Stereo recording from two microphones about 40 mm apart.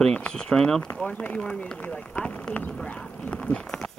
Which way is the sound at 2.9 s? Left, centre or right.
Left.